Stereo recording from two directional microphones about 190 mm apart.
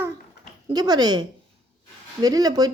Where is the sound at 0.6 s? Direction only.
20° right (ahead or behind).